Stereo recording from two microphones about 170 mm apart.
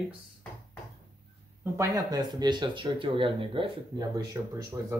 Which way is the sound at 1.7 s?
20° right (ahead or behind).